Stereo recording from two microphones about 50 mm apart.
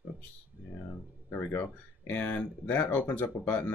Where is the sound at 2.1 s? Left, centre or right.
Left.